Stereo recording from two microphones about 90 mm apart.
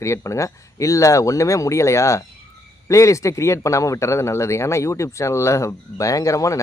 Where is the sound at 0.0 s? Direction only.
35° left (ahead or behind).